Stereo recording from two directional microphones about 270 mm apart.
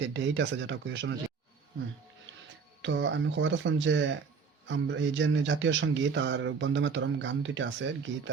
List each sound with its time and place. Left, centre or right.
0.0 s speech: right
2.8 s speech: right